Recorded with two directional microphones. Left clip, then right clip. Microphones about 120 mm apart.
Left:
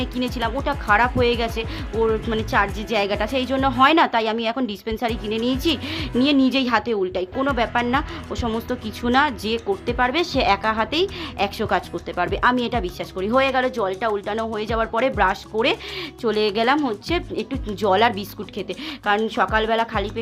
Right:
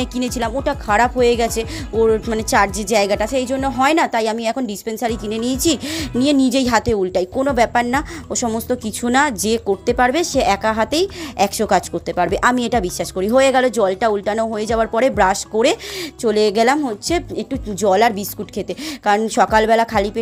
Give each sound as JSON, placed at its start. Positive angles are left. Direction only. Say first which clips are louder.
{"t": 0.0, "sound": "a woman's voice", "louder": "right 3 dB", "side_deg": -50}
{"t": 2.6, "sound": "speech", "louder": "right 5 dB", "side_deg": -50}
{"t": 3.3, "sound": "a woman's voice", "louder": "right 1 dB", "side_deg": -25}
{"t": 7.6, "sound": "a woman's voice", "louder": "right 6 dB", "side_deg": -45}
{"t": 19.0, "sound": "speech", "louder": "right 5 dB", "side_deg": -50}